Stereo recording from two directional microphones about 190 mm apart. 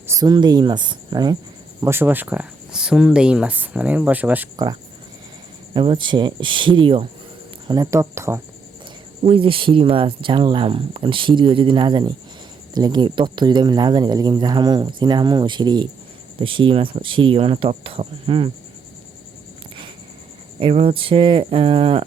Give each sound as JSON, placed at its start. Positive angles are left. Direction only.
{"t": 0.1, "sound": "speech", "side_deg": -20}
{"t": 4.5, "sound": "speech", "side_deg": -20}
{"t": 7.7, "sound": "speech", "side_deg": -15}
{"t": 9.2, "sound": "speech", "side_deg": -30}
{"t": 20.6, "sound": "speech", "side_deg": -30}